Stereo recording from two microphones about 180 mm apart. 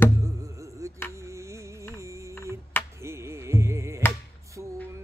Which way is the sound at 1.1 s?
15° right (ahead or behind).